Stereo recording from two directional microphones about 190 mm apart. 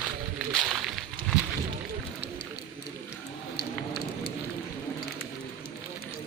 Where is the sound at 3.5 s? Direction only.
60° left (ahead or behind).